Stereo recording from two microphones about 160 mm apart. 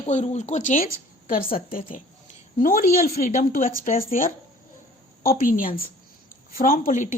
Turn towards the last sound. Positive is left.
turn(degrees=50)  # may be behind; listen again after turning